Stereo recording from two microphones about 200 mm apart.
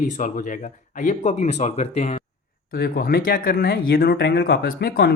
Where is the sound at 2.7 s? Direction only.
45° left (ahead or behind).